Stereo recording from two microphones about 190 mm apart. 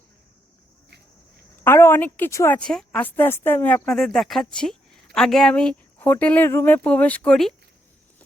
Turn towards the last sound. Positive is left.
turn(degrees=5)  # may be behind; listen again after turning